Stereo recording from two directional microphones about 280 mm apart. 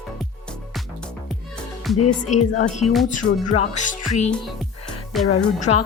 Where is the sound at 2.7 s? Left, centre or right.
Left.